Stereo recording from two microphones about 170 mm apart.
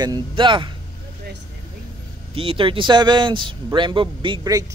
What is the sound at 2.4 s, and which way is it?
Speech, 30° right (ahead or behind).